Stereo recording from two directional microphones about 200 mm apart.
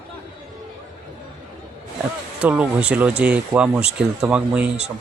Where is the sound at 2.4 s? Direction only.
5° right (ahead or behind).